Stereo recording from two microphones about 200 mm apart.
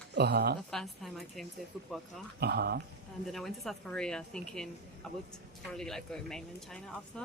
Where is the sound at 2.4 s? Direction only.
55° right (ahead or behind).